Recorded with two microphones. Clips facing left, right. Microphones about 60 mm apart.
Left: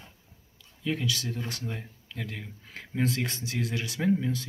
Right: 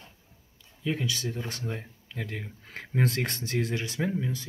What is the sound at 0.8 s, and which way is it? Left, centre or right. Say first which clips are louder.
Speech: even; centre.